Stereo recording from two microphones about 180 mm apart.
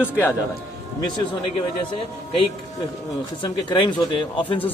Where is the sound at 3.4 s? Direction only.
25° left (ahead or behind).